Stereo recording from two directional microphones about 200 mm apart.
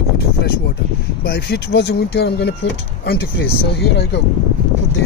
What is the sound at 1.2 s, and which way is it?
Speech, 55° left (ahead or behind).